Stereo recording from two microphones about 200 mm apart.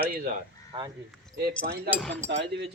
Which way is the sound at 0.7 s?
30° right (ahead or behind).